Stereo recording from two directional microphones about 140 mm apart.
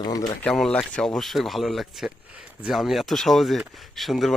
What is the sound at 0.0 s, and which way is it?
Speech, 25° left (ahead or behind).